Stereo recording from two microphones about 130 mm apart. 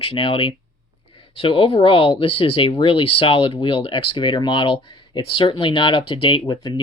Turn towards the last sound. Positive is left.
turn(degrees=35)  # may be behind; listen again after turning